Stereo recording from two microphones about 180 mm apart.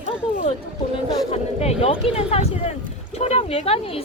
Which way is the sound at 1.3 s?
35° left (ahead or behind).